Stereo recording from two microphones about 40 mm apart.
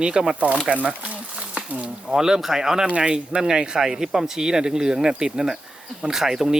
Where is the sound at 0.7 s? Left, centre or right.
Right.